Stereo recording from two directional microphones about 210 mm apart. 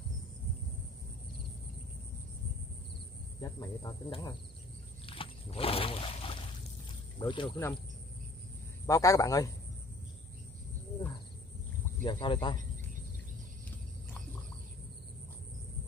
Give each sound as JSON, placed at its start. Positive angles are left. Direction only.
{"t": 3.3, "sound": "speech", "side_deg": 20}
{"t": 5.0, "sound": "a sound", "side_deg": 25}
{"t": 7.2, "sound": "speech", "side_deg": 25}
{"t": 8.8, "sound": "a man's voice", "side_deg": 15}
{"t": 12.0, "sound": "speech", "side_deg": 20}